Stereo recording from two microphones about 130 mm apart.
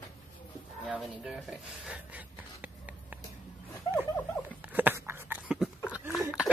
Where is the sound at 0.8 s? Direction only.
5° right (ahead or behind).